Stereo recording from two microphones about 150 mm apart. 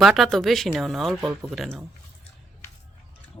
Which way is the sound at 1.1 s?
15° right (ahead or behind).